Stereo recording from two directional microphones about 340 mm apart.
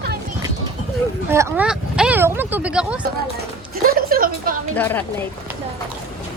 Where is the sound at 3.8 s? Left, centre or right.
Right.